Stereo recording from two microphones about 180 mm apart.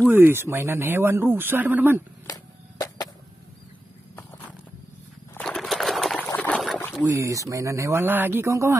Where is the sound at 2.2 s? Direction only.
20° left (ahead or behind).